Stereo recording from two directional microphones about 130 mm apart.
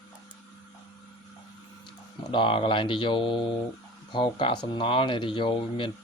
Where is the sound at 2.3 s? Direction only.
40° left (ahead or behind).